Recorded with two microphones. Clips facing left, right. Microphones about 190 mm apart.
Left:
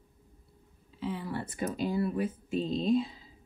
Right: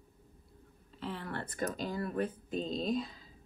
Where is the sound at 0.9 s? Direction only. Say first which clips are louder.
Left 5 dB; centre (ahead or behind).